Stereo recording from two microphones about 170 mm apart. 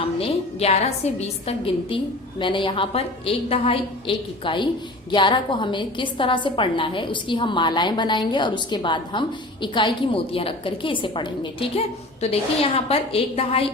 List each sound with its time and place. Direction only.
0.2 s a woman's voice: 40° left (ahead or behind)